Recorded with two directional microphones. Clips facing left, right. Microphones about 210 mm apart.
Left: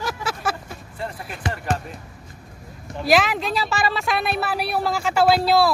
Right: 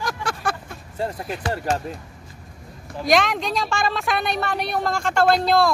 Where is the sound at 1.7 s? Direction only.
40° right (ahead or behind).